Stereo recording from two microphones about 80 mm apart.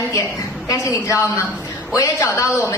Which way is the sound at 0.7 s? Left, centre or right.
Left.